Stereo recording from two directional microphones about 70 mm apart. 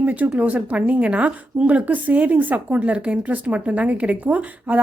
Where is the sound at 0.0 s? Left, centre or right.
Right.